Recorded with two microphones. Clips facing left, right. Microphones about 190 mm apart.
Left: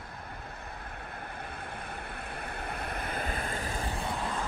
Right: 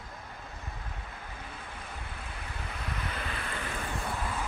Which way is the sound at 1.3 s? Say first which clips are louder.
Left 3 dB; 55° left (ahead or behind).